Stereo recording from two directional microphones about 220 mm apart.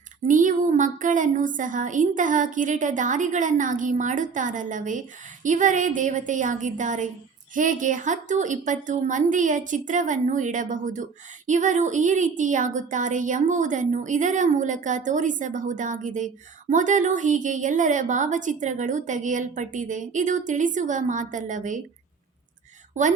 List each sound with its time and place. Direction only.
0.3 s a woman's voice: 35° right (ahead or behind)
23.0 s a woman's voice: 35° right (ahead or behind)